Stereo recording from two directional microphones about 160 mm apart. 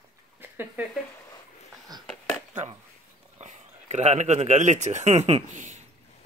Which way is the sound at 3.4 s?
45° right (ahead or behind).